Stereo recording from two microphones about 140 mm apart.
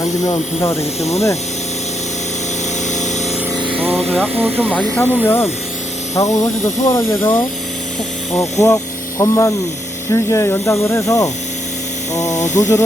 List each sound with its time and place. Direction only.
0.0 s speech: 20° left (ahead or behind)
2.8 s a sound: 60° left (ahead or behind)
3.9 s speech: 5° left (ahead or behind)
4.4 s speech: 15° right (ahead or behind)
4.7 s speech: 15° left (ahead or behind)
8.4 s speech: 25° left (ahead or behind)
12.3 s music: 60° left (ahead or behind)